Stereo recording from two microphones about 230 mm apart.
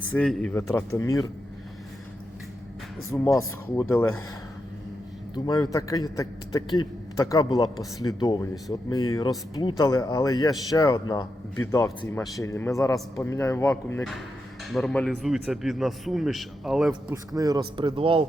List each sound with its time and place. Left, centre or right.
0.1 s a man's voice: centre
3.1 s a man's voice: centre
5.3 s a man's voice: centre
17.1 s speech: centre